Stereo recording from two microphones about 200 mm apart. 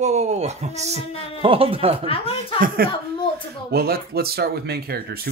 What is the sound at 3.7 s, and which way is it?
Speech, 50° right (ahead or behind).